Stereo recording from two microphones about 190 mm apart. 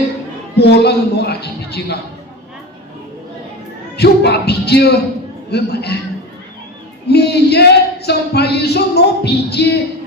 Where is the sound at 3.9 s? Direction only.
60° left (ahead or behind).